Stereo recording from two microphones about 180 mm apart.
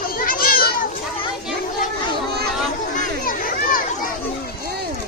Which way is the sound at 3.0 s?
50° left (ahead or behind).